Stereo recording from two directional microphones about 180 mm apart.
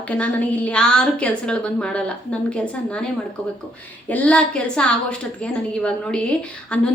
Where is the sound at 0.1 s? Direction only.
10° left (ahead or behind).